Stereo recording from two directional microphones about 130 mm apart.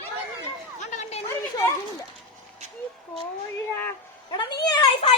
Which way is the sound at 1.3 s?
20° left (ahead or behind).